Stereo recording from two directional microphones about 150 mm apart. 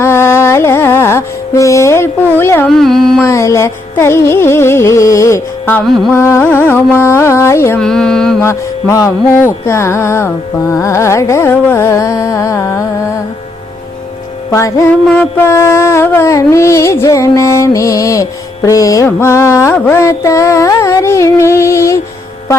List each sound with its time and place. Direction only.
0.0 s carnatic music: 15° left (ahead or behind)
2.6 s carnatic music: centre (ahead or behind)
3.2 s music: 20° left (ahead or behind)
5.8 s music: centre (ahead or behind)
6.1 s music: 15° left (ahead or behind)
7.8 s music: 5° left (ahead or behind)
8.4 s music: 20° left (ahead or behind)
14.5 s music: 20° left (ahead or behind)
15.0 s music: 5° left (ahead or behind)